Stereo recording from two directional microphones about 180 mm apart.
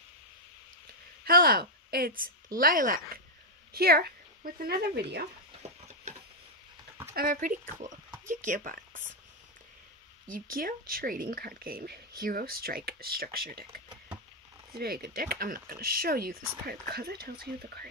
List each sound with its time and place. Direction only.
1.2 s a woman's voice: 55° right (ahead or behind)
7.2 s speech: 50° right (ahead or behind)
10.2 s speech: 50° right (ahead or behind)
14.7 s speech: 55° right (ahead or behind)